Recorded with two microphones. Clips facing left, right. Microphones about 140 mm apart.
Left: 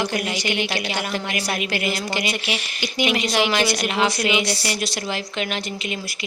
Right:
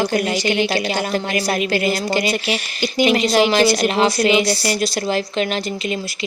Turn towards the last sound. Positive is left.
turn(degrees=-35)  # may be behind; listen again after turning